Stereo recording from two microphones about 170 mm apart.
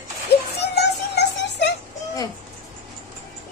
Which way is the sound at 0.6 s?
75° left (ahead or behind).